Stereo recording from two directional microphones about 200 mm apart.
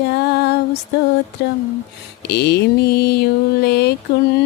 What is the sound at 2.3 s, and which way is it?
Mantra, 55° left (ahead or behind).